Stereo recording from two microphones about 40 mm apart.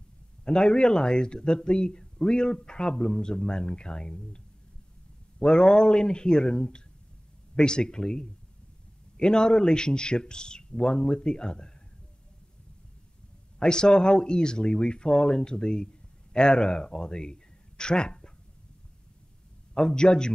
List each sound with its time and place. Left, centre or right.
0.5 s speech: centre
5.4 s speech: centre
13.6 s speech: centre
19.7 s speech: left